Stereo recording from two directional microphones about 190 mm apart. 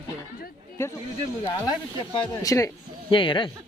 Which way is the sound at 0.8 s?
15° left (ahead or behind).